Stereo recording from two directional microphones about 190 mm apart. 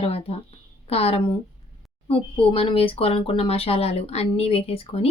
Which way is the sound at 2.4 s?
30° left (ahead or behind).